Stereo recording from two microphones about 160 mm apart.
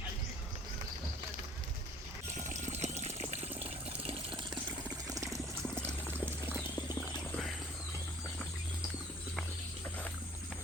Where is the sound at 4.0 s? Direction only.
35° right (ahead or behind).